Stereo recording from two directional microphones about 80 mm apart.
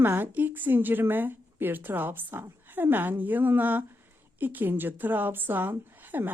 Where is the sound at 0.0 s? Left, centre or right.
Right.